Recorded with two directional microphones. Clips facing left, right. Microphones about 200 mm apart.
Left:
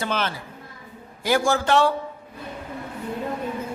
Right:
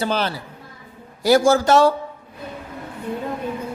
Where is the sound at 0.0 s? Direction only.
35° right (ahead or behind).